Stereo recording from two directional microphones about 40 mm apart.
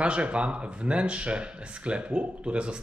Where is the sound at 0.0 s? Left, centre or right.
Right.